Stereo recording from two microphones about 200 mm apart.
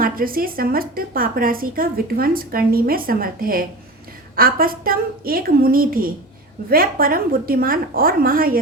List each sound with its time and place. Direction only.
0.0 s a woman's voice: 45° right (ahead or behind)